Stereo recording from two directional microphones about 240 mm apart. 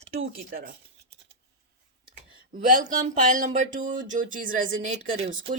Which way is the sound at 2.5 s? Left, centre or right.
Right.